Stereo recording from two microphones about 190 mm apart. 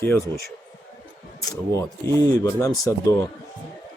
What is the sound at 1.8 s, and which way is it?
Speech, 15° left (ahead or behind).